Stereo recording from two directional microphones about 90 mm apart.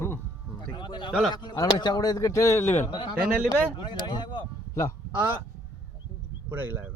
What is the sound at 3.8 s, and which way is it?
Speech, 60° left (ahead or behind).